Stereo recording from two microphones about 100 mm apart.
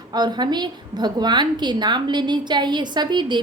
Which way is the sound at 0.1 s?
45° right (ahead or behind).